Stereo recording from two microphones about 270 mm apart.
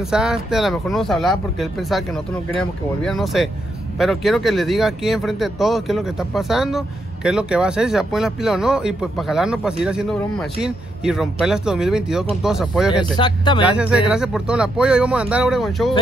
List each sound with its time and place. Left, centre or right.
0.0 s speech: centre
13.1 s speech: centre
13.7 s speech: centre